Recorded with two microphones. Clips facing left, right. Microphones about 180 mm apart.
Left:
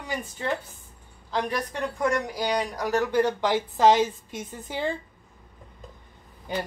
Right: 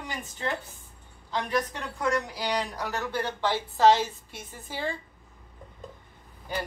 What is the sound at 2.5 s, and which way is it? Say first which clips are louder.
Speech: left 7 dB; 10° left (ahead or behind).